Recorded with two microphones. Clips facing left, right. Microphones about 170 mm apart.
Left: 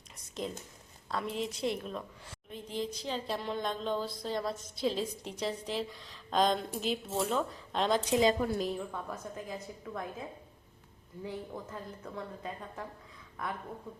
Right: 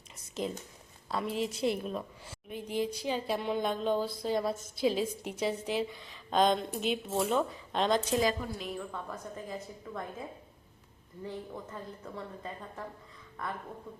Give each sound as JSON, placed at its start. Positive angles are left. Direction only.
{"t": 0.4, "sound": "a woman's voice", "side_deg": -5}
{"t": 8.1, "sound": "a woman's voice", "side_deg": 20}
{"t": 8.9, "sound": "a woman's voice", "side_deg": 5}